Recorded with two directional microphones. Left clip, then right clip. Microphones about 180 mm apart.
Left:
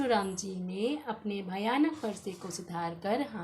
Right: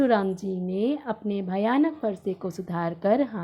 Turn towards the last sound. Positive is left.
turn(degrees=-45)  # may be behind; listen again after turning